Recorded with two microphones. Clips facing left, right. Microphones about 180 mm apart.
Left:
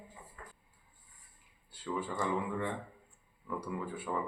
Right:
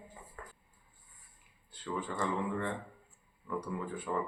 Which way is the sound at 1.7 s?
10° left (ahead or behind).